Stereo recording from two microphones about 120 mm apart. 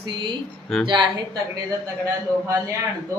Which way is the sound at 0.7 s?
Centre (ahead or behind).